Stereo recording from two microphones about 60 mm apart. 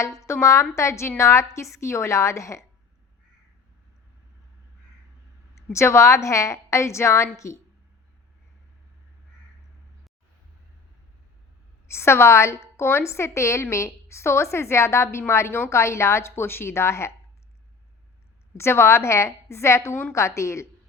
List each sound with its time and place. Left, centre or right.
0.0 s a woman's voice: left
5.5 s a woman's voice: left
11.9 s a woman's voice: left
18.5 s a woman's voice: left